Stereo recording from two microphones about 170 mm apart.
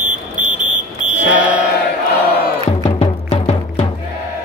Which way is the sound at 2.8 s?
40° left (ahead or behind).